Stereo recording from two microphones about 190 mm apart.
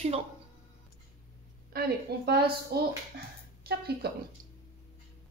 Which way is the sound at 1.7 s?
55° right (ahead or behind).